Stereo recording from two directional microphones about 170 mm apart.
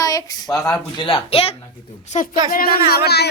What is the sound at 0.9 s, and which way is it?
A woman's voice, 30° left (ahead or behind).